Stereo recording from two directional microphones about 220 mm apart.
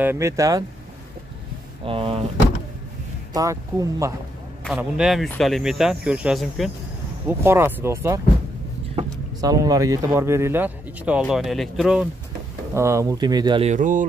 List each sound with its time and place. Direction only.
0.0 s speech: 10° right (ahead or behind)
1.9 s speech: 25° right (ahead or behind)
3.3 s speech: 15° right (ahead or behind)
4.6 s speech: 5° right (ahead or behind)
12.7 s speech: 15° right (ahead or behind); by 14.0 s 35° right (ahead or behind)